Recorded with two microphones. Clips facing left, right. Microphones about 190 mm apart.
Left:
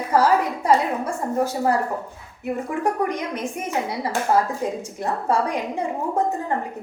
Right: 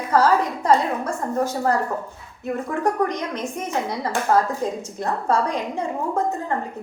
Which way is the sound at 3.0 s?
10° left (ahead or behind).